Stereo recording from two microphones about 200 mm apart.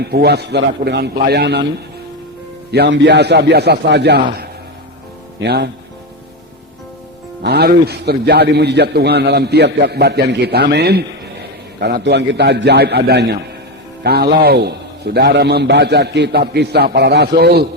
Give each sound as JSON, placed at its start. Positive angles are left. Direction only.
{"t": 0.0, "sound": "a man's voice", "side_deg": -55}
{"t": 2.7, "sound": "a man's voice", "side_deg": -60}
{"t": 7.4, "sound": "a man's voice", "side_deg": -55}